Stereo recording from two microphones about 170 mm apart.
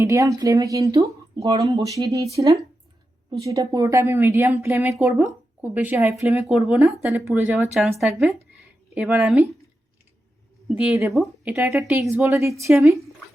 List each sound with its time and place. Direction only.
0.0 s a woman's voice: 15° right (ahead or behind)
11.1 s speech: centre (ahead or behind)
11.5 s a woman's voice: 15° right (ahead or behind)